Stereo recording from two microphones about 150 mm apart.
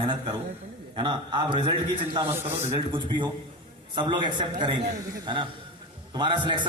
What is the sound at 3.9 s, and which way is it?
A man's voice, 30° right (ahead or behind).